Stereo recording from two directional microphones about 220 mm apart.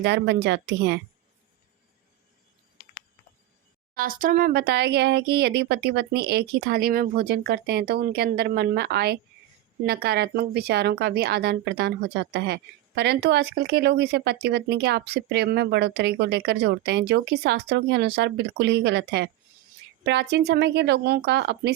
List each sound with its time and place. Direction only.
0.0 s speech: 50° right (ahead or behind)
3.9 s speech: 40° right (ahead or behind)